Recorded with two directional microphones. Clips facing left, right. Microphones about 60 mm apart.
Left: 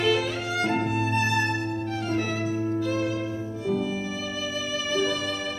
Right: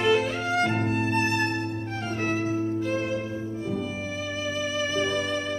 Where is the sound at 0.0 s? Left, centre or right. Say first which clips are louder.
Right 1 dB; right.